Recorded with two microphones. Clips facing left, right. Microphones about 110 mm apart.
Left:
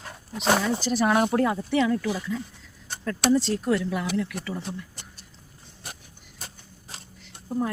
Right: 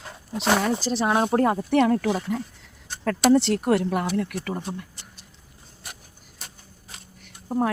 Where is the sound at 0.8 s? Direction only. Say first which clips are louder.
Even; 30° right (ahead or behind).